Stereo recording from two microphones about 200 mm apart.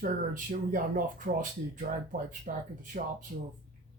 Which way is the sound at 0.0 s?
45° right (ahead or behind).